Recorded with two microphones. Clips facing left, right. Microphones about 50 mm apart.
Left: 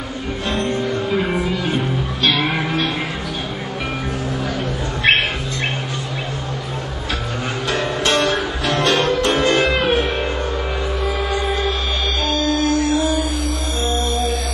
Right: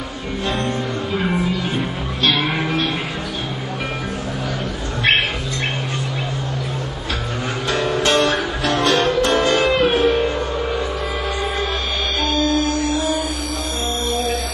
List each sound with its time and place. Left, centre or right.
0.7 s music: left
2.2 s music: centre
7.7 s music: left
12.5 s music: left